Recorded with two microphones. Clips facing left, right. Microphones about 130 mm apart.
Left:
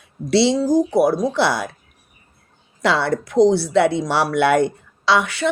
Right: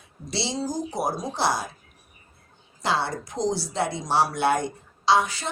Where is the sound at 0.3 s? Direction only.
65° left (ahead or behind).